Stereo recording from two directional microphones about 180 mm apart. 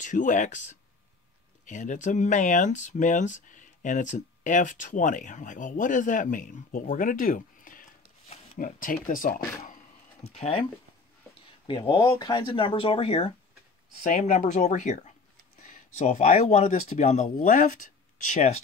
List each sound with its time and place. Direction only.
0.0 s speech: 45° left (ahead or behind)
11.9 s speech: 25° left (ahead or behind); by 18.6 s 40° left (ahead or behind)